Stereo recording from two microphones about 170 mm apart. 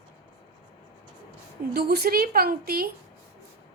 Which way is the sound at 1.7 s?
70° right (ahead or behind).